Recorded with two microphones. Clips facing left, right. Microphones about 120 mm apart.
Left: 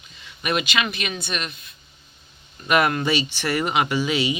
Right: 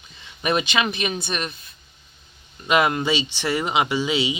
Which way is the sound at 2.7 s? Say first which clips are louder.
Even; 20° right (ahead or behind).